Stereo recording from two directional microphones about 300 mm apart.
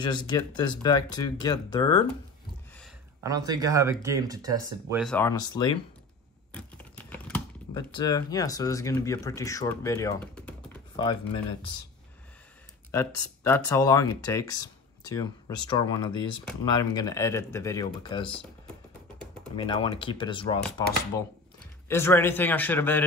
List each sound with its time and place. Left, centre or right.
0.0 s speech: centre
3.3 s speech: centre
5.0 s speech: centre
6.5 s a sound: centre
7.9 s speech: centre
12.9 s speech: centre
19.5 s speech: centre
21.8 s speech: centre